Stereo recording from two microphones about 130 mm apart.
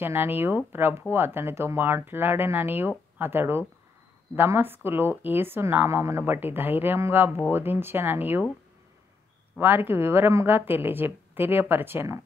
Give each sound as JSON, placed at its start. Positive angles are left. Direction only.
{"t": 0.0, "sound": "a woman's voice", "side_deg": -20}
{"t": 9.6, "sound": "a woman's voice", "side_deg": -15}